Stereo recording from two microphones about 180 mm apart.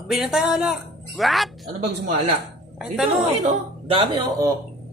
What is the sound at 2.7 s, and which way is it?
Speech, 5° right (ahead or behind).